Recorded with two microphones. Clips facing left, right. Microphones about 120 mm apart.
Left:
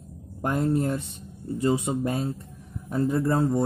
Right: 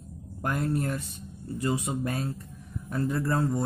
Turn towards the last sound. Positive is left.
turn(degrees=20)  # may be behind; listen again after turning